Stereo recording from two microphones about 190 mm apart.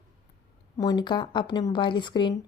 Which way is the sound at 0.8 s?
20° left (ahead or behind).